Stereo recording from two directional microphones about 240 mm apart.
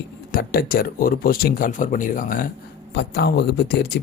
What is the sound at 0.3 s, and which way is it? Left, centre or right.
Speech, left.